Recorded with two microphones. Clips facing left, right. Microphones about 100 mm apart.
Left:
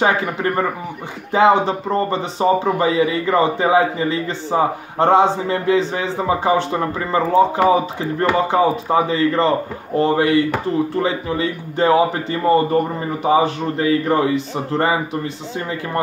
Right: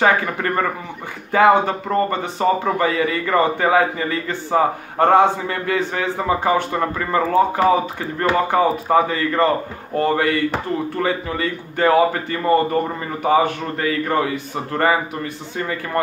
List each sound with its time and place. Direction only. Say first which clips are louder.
0.0 s a man's voice: even; 20° left (ahead or behind)